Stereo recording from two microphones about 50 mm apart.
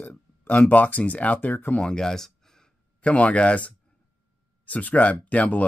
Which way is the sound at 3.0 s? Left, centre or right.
Left.